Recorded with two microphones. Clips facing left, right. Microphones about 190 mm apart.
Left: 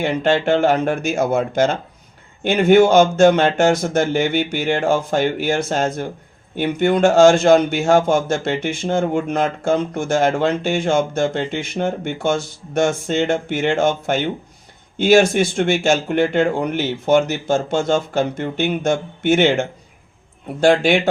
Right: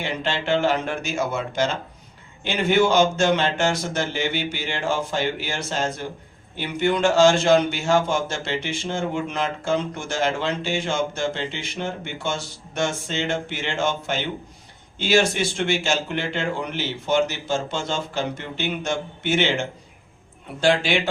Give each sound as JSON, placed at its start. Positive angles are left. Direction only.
{"t": 0.0, "sound": "a man's voice", "side_deg": 50}